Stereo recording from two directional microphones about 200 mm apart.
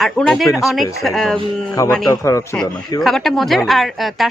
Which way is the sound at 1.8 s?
15° left (ahead or behind).